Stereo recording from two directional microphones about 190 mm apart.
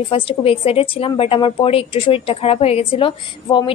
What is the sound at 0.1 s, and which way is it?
A woman's voice, 30° left (ahead or behind).